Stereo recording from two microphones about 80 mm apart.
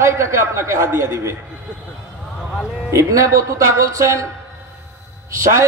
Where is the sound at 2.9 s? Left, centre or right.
Right.